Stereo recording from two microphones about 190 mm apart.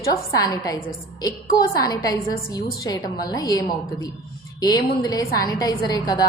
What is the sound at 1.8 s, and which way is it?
A woman's voice, 20° left (ahead or behind).